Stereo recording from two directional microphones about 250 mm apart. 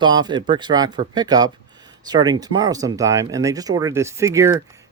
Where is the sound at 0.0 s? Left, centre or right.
Centre.